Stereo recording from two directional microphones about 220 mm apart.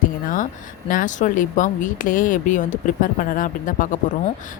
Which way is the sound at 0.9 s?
35° left (ahead or behind).